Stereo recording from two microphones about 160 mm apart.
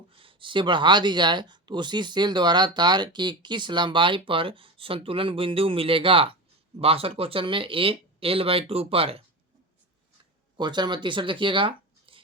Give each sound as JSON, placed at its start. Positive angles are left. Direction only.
{"t": 0.1, "sound": "speech", "side_deg": -35}
{"t": 10.6, "sound": "speech", "side_deg": -30}